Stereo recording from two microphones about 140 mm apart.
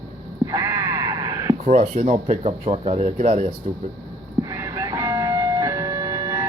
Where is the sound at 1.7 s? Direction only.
55° right (ahead or behind).